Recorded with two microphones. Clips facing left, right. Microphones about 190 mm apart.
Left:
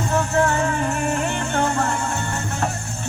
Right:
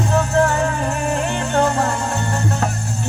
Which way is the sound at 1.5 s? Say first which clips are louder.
Right 5 dB; 35° right (ahead or behind).